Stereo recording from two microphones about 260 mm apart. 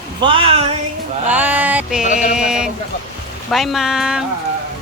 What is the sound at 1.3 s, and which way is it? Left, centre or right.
Speech, centre.